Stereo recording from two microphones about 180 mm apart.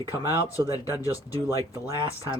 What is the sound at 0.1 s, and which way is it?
Speech, 20° left (ahead or behind).